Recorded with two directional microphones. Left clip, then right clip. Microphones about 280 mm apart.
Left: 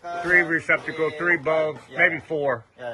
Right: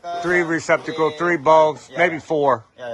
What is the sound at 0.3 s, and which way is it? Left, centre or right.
Speech, centre.